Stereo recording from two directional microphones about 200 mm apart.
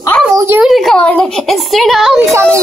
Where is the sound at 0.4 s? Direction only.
10° right (ahead or behind).